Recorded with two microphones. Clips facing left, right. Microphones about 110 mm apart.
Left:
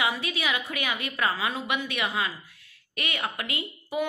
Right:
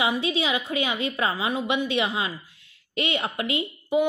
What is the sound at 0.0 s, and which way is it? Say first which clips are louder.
Speech: right 4 dB; 20° right (ahead or behind).